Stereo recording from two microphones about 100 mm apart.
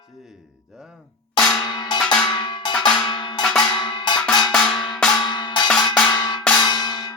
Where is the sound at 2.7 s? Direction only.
5° left (ahead or behind).